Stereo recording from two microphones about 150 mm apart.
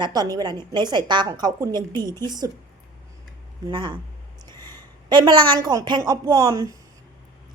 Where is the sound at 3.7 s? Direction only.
30° right (ahead or behind).